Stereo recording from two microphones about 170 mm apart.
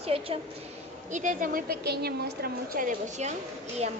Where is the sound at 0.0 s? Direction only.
35° right (ahead or behind).